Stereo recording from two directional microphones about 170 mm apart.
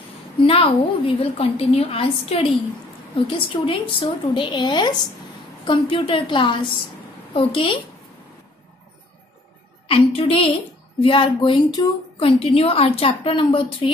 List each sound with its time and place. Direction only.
0.4 s a woman's voice: 35° left (ahead or behind)
9.8 s a woman's voice: 35° left (ahead or behind)